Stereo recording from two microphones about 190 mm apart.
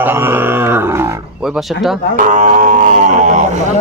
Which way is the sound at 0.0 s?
10° right (ahead or behind).